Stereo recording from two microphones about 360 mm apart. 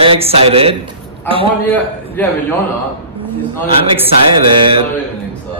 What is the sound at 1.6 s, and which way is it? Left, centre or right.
Speech, centre.